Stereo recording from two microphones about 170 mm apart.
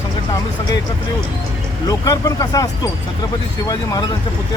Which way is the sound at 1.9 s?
20° left (ahead or behind).